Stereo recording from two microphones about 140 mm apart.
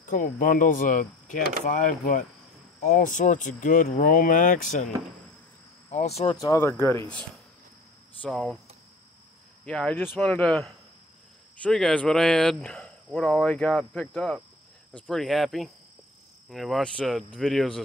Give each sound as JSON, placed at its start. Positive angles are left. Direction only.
{"t": 0.0, "sound": "speech", "side_deg": 70}
{"t": 5.9, "sound": "speech", "side_deg": 55}
{"t": 6.3, "sound": "speech", "side_deg": 25}
{"t": 8.2, "sound": "speech", "side_deg": 5}
{"t": 9.7, "sound": "speech", "side_deg": 5}